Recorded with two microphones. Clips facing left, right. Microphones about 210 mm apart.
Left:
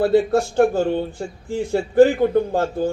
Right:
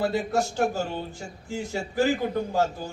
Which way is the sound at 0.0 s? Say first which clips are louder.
Left 9 dB; 55° left (ahead or behind).